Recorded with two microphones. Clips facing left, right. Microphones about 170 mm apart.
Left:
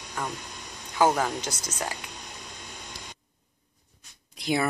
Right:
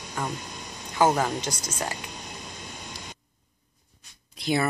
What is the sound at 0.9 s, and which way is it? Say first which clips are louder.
Speech: right 1 dB; 5° right (ahead or behind).